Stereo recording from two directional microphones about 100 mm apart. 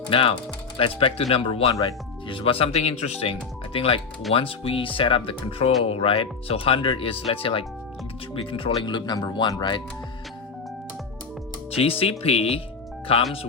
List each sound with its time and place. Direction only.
0.1 s speech: 65° left (ahead or behind)
11.7 s speech: 70° left (ahead or behind)